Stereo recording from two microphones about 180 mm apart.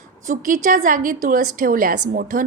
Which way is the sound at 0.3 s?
50° right (ahead or behind).